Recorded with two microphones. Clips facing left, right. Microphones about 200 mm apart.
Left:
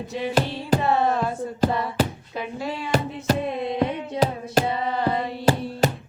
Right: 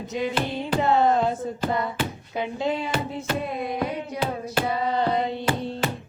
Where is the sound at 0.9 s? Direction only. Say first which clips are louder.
Right 5 dB; 20° right (ahead or behind).